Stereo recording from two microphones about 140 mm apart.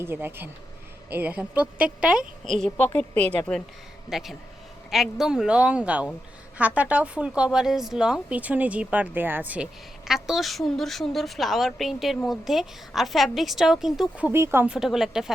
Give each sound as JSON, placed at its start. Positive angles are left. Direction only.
{"t": 0.0, "sound": "speech", "side_deg": -15}
{"t": 4.1, "sound": "speech", "side_deg": 0}
{"t": 10.2, "sound": "speech", "side_deg": 0}